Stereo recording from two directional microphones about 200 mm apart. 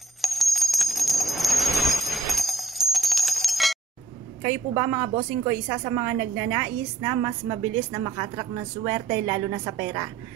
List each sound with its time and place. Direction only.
0.2 s bell: centre (ahead or behind)
4.4 s a woman's voice: 20° right (ahead or behind)